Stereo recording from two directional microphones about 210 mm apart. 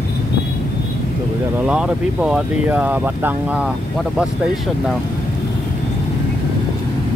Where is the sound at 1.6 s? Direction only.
5° right (ahead or behind).